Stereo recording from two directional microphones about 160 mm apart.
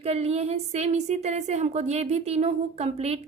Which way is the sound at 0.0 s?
40° right (ahead or behind).